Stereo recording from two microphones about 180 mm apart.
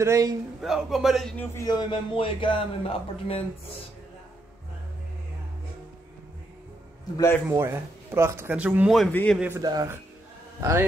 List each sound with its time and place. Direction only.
0.0 s a man's voice: 20° right (ahead or behind)
0.6 s speech: centre (ahead or behind)
1.4 s a man's voice: 15° left (ahead or behind); by 3.4 s 30° left (ahead or behind)
7.2 s a man's voice: 15° left (ahead or behind)
7.4 s speech: 15° right (ahead or behind)
9.1 s a man's voice: 10° left (ahead or behind)
9.6 s a man's voice: 20° right (ahead or behind)